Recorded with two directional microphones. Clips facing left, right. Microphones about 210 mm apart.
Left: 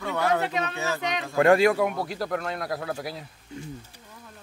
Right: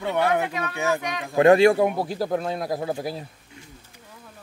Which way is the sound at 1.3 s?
20° right (ahead or behind).